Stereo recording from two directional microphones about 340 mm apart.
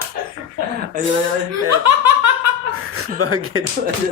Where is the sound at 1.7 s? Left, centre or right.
Right.